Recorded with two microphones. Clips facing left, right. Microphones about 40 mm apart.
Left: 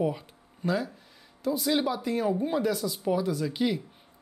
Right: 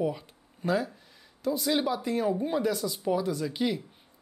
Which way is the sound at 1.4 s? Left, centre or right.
Centre.